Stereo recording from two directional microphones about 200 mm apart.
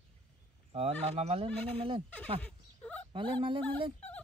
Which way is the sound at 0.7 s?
30° right (ahead or behind).